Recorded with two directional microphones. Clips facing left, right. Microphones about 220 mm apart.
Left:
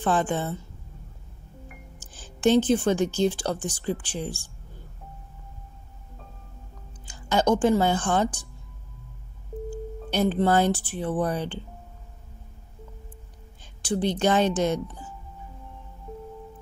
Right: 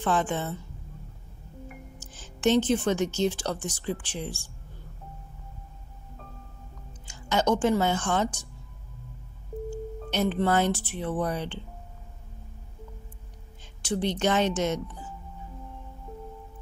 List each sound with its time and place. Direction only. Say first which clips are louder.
0.0 s a woman's voice: left 2 dB; 35° left (ahead or behind)
2.0 s a woman's voice: even; 30° left (ahead or behind)
7.1 s speech: left 3 dB; 35° left (ahead or behind)
9.7 s tuning fork: left 2 dB; 35° left (ahead or behind)
11.2 s a woman's voice: left 3 dB; 35° left (ahead or behind)
13.8 s a woman's voice: left 3 dB; 35° left (ahead or behind)